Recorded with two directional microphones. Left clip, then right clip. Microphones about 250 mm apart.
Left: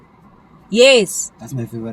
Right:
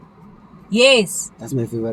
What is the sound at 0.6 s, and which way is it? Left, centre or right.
Speech, centre.